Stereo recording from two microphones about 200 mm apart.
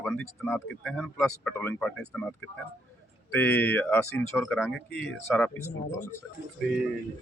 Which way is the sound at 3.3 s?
10° left (ahead or behind).